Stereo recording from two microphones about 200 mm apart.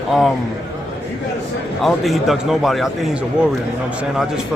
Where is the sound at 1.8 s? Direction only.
Centre (ahead or behind).